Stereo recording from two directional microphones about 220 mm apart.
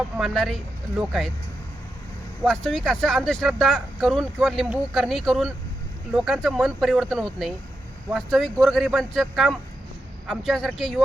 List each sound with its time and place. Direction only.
0.2 s speech: centre (ahead or behind)
2.4 s speech: centre (ahead or behind)